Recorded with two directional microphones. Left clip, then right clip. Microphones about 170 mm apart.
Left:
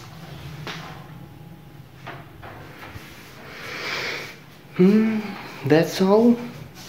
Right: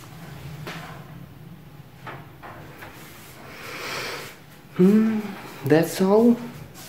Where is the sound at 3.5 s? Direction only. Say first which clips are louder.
Left 3 dB; 5° right (ahead or behind).